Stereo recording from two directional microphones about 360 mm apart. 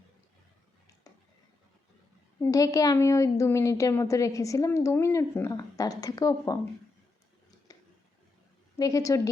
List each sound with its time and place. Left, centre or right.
2.4 s a woman's voice: centre
7.7 s a sound: centre
8.8 s a woman's voice: centre